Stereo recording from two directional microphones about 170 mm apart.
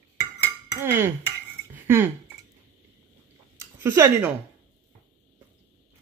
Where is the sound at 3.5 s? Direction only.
15° right (ahead or behind).